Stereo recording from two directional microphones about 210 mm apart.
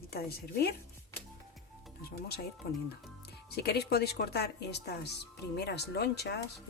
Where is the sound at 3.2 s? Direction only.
50° left (ahead or behind).